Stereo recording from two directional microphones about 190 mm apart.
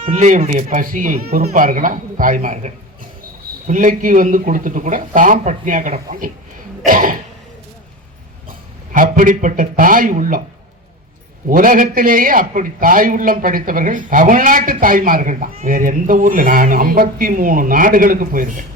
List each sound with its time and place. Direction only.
0.0 s a man's voice: 40° right (ahead or behind)
8.9 s a man's voice: 45° right (ahead or behind)
11.4 s a man's voice: 45° right (ahead or behind)